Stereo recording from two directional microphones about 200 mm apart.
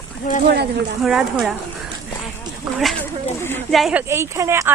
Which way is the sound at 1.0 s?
Centre (ahead or behind).